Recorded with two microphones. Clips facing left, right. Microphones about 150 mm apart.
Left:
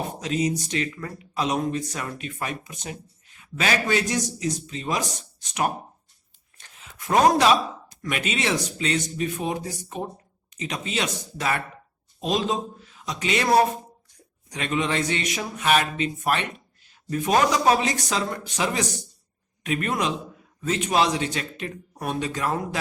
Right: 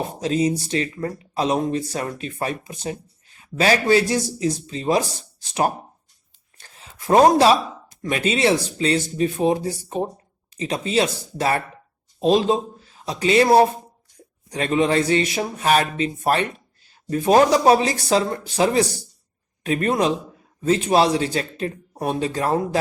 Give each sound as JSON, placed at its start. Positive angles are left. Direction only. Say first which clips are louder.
{"t": 0.0, "sound": "speech", "louder": "right 4 dB", "side_deg": -30}
{"t": 6.6, "sound": "a sound", "louder": "right 1 dB", "side_deg": -30}
{"t": 8.0, "sound": "speech", "louder": "right 7 dB", "side_deg": -30}